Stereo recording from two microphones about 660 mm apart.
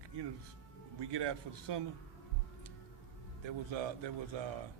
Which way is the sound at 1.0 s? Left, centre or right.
Right.